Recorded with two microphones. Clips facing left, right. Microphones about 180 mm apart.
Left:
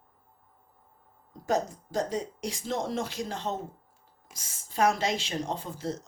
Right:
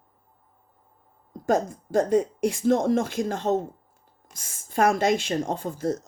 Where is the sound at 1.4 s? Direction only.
50° right (ahead or behind).